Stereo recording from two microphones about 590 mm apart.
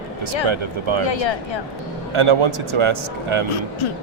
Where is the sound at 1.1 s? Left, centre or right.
Left.